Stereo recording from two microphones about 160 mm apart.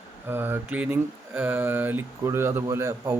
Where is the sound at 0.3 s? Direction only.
15° right (ahead or behind).